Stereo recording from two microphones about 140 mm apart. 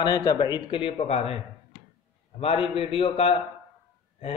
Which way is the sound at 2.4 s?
45° left (ahead or behind).